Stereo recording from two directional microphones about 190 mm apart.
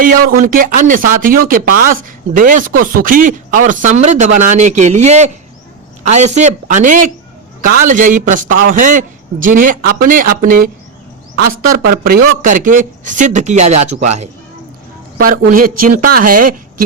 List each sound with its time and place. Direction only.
0.0 s speech: 45° right (ahead or behind)
15.2 s speech: 50° right (ahead or behind)